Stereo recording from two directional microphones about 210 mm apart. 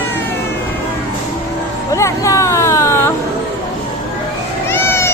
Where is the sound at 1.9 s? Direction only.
15° left (ahead or behind).